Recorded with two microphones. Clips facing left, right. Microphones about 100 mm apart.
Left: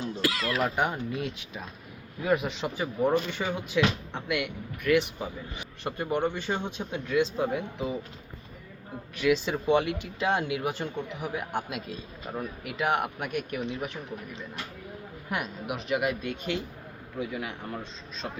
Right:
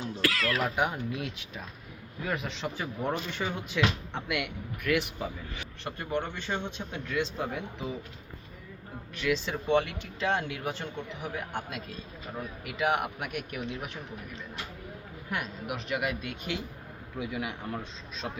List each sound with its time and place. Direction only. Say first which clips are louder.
0.2 s speech: even; 20° left (ahead or behind)
0.6 s speech: left 2 dB; 5° right (ahead or behind)
2.2 s speech: left 6 dB; 10° left (ahead or behind)
5.5 s speech: left 5 dB; 15° left (ahead or behind)
9.1 s speech: left 5 dB; 10° left (ahead or behind)
15.3 s a man's voice: left 2 dB; 5° left (ahead or behind); by 17.5 s 10° right (ahead or behind)
17.7 s speech: even; centre (ahead or behind)